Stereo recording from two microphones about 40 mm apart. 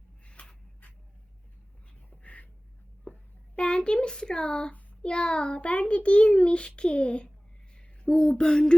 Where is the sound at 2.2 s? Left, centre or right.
Left.